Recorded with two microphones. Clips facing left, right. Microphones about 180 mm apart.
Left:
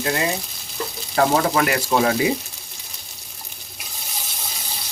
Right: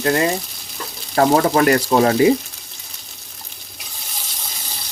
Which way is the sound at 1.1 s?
40° right (ahead or behind).